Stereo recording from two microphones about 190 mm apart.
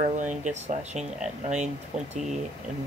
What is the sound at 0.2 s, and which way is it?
Speech, 40° right (ahead or behind).